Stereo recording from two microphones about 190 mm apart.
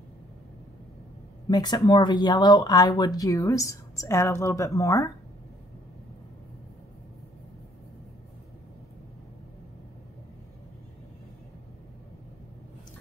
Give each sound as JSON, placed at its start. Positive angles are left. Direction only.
{"t": 1.5, "sound": "speech", "side_deg": 20}